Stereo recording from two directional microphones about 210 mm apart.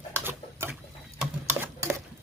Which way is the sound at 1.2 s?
10° right (ahead or behind).